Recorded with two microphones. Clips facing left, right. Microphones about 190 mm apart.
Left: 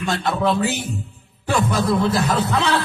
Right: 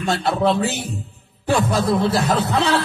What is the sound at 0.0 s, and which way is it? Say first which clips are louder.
Speech: right 2 dB; 35° right (ahead or behind).